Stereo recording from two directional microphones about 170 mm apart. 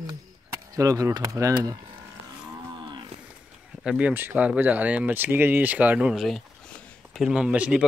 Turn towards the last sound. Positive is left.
turn(degrees=-5)  # may be behind; listen again after turning